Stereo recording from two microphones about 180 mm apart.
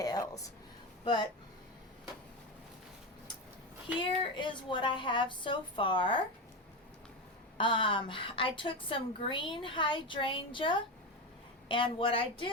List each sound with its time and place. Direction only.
0.0 s a sound: 20° left (ahead or behind)
1.0 s a woman's voice: 25° left (ahead or behind)
4.0 s a woman's voice: 25° left (ahead or behind)
7.6 s a woman's voice: 30° left (ahead or behind)